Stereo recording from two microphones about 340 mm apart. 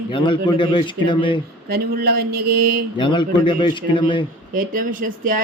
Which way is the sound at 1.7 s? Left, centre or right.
Right.